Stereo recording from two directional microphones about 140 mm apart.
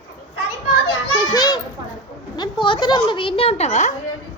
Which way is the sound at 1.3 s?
25° left (ahead or behind).